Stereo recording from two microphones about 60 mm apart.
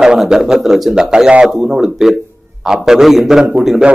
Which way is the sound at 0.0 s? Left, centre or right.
Centre.